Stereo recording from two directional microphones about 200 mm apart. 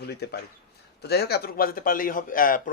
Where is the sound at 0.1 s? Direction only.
55° left (ahead or behind).